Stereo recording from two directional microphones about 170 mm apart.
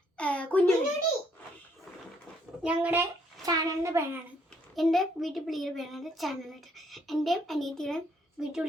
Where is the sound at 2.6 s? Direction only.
10° right (ahead or behind).